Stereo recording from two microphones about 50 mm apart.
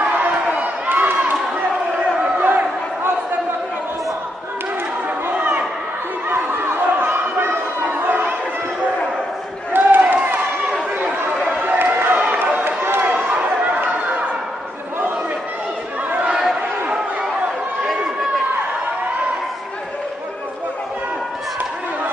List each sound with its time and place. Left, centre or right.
0.0 s run: right
0.8 s a sound: right
2.3 s crowd: right
6.2 s chatter: right
9.7 s a sound: right
11.6 s run: right
13.1 s chatter: right
16.1 s chatter: right